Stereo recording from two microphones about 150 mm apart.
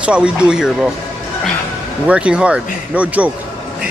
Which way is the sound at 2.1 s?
5° right (ahead or behind).